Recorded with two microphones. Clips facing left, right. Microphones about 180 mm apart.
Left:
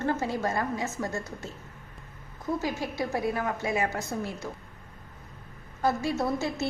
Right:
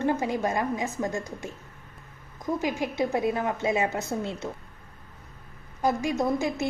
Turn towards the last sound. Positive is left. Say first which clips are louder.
# right 3 dB
turn(degrees=-15)  # may be behind; listen again after turning